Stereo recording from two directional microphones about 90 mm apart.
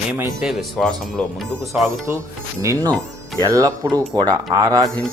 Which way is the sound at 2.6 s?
35° right (ahead or behind).